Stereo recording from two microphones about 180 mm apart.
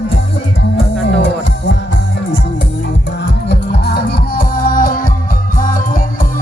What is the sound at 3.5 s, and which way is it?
Music, 65° left (ahead or behind).